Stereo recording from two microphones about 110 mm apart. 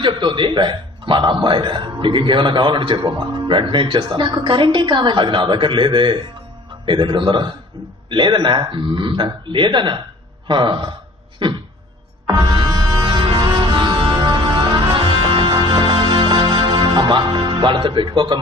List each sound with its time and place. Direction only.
0.0 s a man's voice: 45° right (ahead or behind)
11.4 s a sound: 45° right (ahead or behind)
12.3 s music: 40° right (ahead or behind)